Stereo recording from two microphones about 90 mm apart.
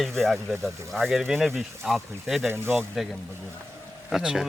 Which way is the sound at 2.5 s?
25° right (ahead or behind).